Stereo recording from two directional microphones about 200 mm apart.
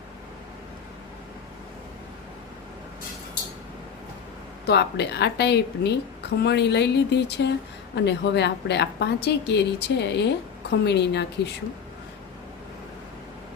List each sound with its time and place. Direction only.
4.6 s a woman's voice: 55° left (ahead or behind)